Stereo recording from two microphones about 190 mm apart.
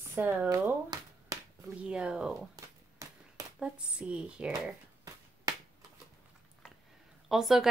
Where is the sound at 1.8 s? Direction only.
5° right (ahead or behind).